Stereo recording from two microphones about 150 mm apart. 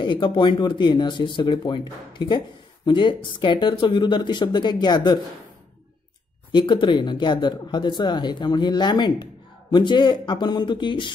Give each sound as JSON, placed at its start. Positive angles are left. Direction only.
{"t": 0.0, "sound": "speech", "side_deg": 30}
{"t": 6.5, "sound": "speech", "side_deg": 30}